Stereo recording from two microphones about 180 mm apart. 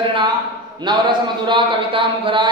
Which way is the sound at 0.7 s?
25° right (ahead or behind).